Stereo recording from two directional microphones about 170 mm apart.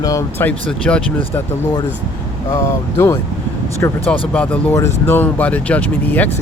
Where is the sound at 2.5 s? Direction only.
20° left (ahead or behind).